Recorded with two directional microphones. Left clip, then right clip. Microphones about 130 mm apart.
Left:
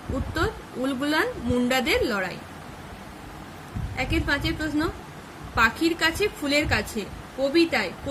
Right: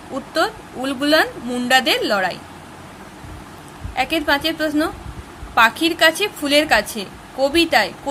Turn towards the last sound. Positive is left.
turn(degrees=-65)  # may be behind; listen again after turning